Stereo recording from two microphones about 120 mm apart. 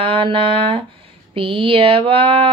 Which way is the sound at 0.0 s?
45° right (ahead or behind).